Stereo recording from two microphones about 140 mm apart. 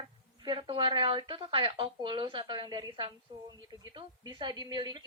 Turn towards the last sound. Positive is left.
turn(degrees=-30)  # may be behind; listen again after turning